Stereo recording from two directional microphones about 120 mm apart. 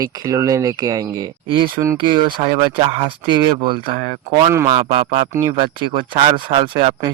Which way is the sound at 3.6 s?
40° right (ahead or behind).